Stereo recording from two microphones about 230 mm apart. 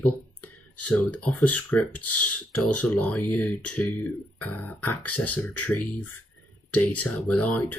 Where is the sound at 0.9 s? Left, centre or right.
Centre.